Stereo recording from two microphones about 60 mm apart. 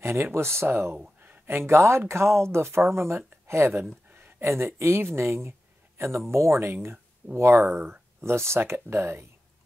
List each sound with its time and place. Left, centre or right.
0.0 s speech: right
4.1 s a sound: right
4.4 s speech: right